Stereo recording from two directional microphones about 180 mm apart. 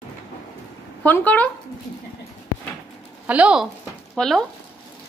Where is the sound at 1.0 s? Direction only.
10° left (ahead or behind).